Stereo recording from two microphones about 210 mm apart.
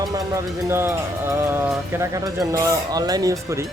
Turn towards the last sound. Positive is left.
turn(degrees=-15)  # may be behind; listen again after turning